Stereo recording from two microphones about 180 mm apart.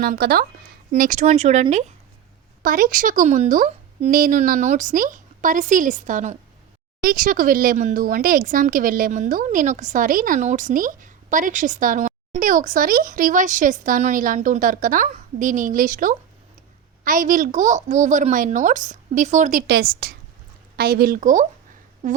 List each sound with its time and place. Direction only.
0.0 s speech: 55° right (ahead or behind)
1.3 s speech: 35° right (ahead or behind)
2.6 s speech: 50° right (ahead or behind)
19.6 s speech: 60° right (ahead or behind); by 22.2 s 45° right (ahead or behind)